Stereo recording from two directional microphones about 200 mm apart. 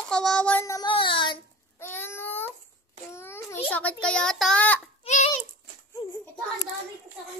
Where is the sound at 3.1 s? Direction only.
15° left (ahead or behind).